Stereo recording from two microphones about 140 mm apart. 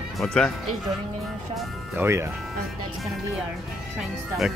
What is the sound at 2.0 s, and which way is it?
Speech, 20° right (ahead or behind).